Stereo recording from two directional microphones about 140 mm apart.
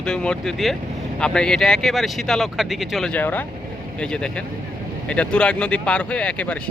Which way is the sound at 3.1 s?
10° left (ahead or behind).